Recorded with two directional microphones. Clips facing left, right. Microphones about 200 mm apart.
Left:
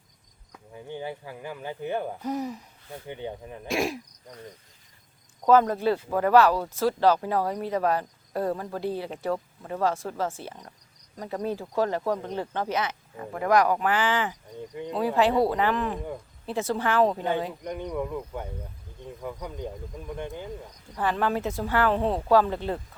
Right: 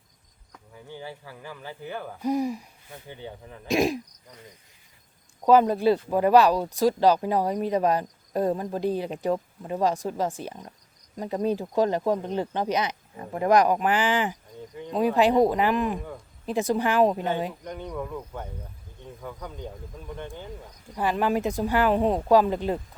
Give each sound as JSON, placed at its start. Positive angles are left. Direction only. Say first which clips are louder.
{"t": 0.9, "sound": "speech", "louder": "left 4 dB", "side_deg": 20}
{"t": 2.2, "sound": "speech", "louder": "right 5 dB", "side_deg": -10}
{"t": 3.1, "sound": "speech", "louder": "left 5 dB", "side_deg": 20}
{"t": 3.7, "sound": "speech", "louder": "right 4 dB", "side_deg": -20}
{"t": 5.5, "sound": "speech", "louder": "right 2 dB", "side_deg": -15}
{"t": 17.6, "sound": "speech", "louder": "left 3 dB", "side_deg": 15}
{"t": 20.9, "sound": "speech", "louder": "right 2 dB", "side_deg": -15}